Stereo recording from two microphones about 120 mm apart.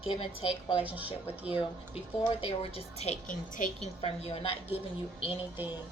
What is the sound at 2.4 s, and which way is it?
Speech, 55° left (ahead or behind).